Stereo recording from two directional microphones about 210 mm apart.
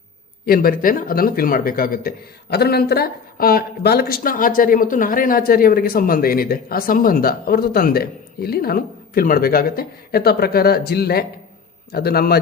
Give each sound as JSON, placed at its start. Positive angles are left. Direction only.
{"t": 0.4, "sound": "speech", "side_deg": 45}